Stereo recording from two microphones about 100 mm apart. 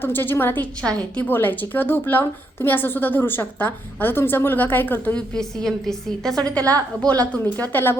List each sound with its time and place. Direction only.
0.0 s a woman's voice: 20° left (ahead or behind)